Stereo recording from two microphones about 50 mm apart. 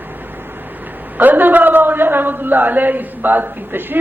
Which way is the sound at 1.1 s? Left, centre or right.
Right.